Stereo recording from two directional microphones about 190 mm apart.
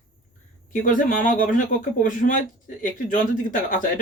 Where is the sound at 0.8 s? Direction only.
45° left (ahead or behind).